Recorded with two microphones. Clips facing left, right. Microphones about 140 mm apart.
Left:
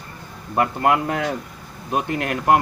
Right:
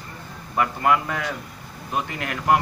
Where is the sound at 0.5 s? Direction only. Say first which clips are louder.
Left 2 dB; 45° left (ahead or behind).